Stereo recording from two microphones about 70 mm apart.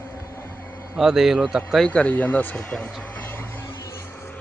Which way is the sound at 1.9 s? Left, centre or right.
Left.